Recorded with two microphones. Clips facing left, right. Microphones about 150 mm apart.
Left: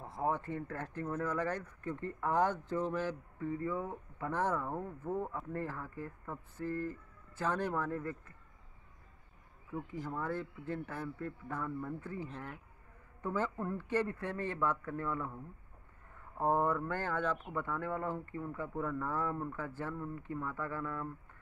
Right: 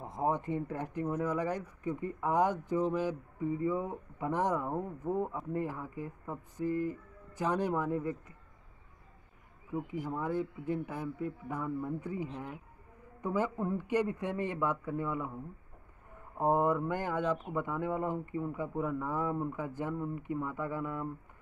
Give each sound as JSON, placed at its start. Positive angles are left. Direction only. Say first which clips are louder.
{"t": 0.0, "sound": "speech", "louder": "right 3 dB", "side_deg": -20}
{"t": 9.7, "sound": "speech", "louder": "right 4 dB", "side_deg": -15}